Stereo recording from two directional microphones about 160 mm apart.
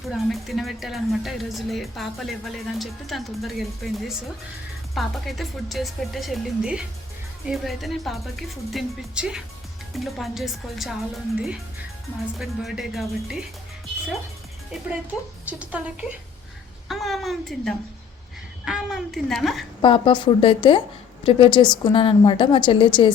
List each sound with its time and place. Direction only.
0.0 s a woman's voice: centre (ahead or behind)
15.4 s a woman's voice: 10° right (ahead or behind)
19.8 s a woman's voice: 30° left (ahead or behind)